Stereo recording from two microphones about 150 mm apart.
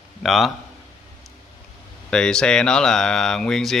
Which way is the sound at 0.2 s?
Centre (ahead or behind).